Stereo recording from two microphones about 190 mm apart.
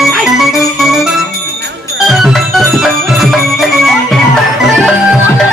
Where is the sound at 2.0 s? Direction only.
Centre (ahead or behind).